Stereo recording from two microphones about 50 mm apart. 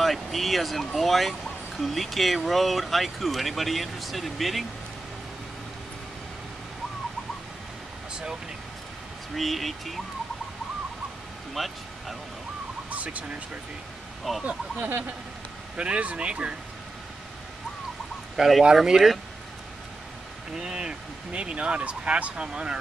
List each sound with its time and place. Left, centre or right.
0.0 s speech: centre
8.1 s vehicle: centre
9.3 s speech: centre
11.5 s speech: centre
12.9 s speech: right
14.3 s speech: centre
14.8 s speech: right
15.7 s speech: right
18.3 s speech: centre
20.5 s speech: centre